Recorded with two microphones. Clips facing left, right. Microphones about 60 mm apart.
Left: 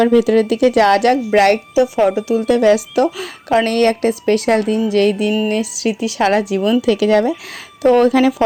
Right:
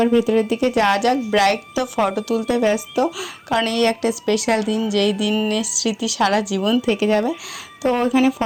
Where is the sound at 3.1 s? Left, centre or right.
Left.